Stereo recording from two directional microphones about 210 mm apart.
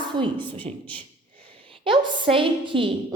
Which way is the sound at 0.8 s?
5° left (ahead or behind).